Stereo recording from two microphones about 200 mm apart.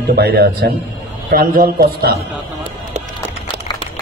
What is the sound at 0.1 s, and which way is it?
A man's voice, 50° right (ahead or behind).